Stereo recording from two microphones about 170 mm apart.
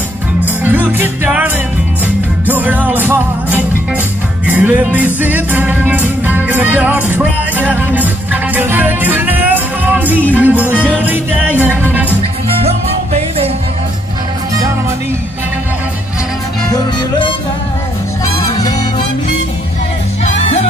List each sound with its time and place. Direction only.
0.7 s music: 10° right (ahead or behind)
12.6 s music: 35° right (ahead or behind)
18.4 s music: 20° left (ahead or behind)